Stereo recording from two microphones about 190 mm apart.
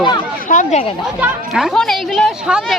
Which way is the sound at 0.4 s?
40° left (ahead or behind).